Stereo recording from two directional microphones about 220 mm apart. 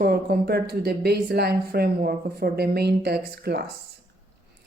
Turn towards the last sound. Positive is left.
turn(degrees=-45)  # may be behind; listen again after turning